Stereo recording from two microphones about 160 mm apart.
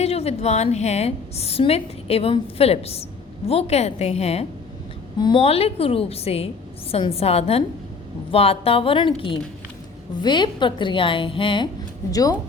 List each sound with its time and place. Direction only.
0.0 s a woman's voice: 40° left (ahead or behind); by 12.4 s 20° left (ahead or behind)